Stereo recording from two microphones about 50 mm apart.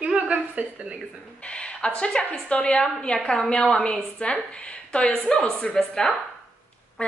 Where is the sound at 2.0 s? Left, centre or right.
Centre.